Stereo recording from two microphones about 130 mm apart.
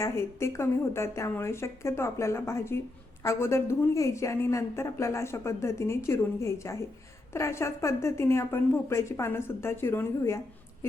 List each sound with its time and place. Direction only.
0.0 s a woman's voice: 20° left (ahead or behind)